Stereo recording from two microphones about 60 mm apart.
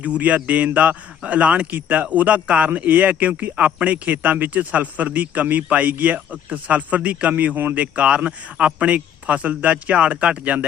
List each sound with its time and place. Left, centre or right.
0.0 s speech: right